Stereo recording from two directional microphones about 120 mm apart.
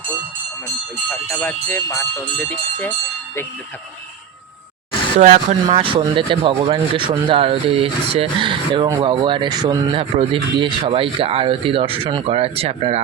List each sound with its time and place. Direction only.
1.1 s speech: 15° left (ahead or behind)
5.2 s speech: 70° right (ahead or behind)
5.6 s speech: 45° right (ahead or behind)